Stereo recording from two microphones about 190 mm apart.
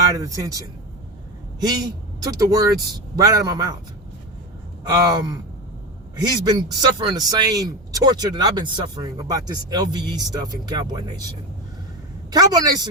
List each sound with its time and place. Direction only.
0.1 s speech: 15° right (ahead or behind)
4.9 s speech: 20° right (ahead or behind)